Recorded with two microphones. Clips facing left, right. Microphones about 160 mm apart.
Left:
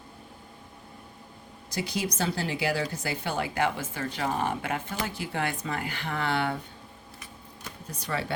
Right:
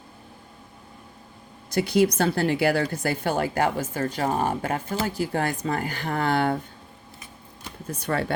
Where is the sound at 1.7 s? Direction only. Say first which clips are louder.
Right 10 dB; 60° right (ahead or behind).